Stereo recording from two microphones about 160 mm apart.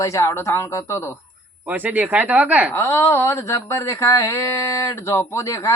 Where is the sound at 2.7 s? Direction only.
15° left (ahead or behind).